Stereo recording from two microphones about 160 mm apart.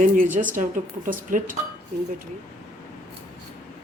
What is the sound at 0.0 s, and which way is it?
Speech, 55° right (ahead or behind).